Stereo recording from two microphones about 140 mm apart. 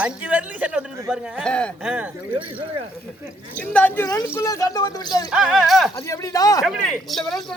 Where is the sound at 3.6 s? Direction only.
10° left (ahead or behind).